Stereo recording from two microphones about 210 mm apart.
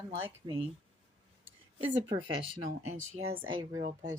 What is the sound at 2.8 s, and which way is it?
Speech, 85° right.